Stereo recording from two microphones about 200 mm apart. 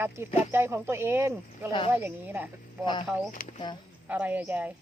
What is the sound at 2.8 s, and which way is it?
Speech, 25° left (ahead or behind).